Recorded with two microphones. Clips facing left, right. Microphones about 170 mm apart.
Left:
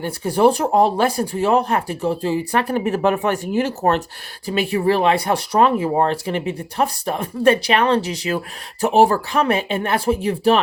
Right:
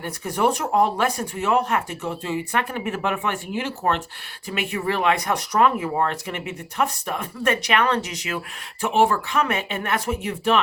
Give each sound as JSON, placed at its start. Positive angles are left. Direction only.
{"t": 0.0, "sound": "speech", "side_deg": 30}